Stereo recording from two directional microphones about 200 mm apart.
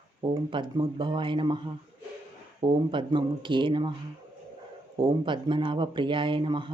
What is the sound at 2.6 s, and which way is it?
Speech, 25° right (ahead or behind).